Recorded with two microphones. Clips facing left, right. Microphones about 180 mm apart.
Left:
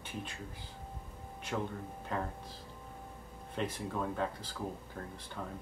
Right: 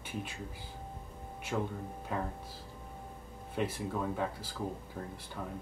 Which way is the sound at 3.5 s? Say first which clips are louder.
Right 2 dB; 5° right (ahead or behind).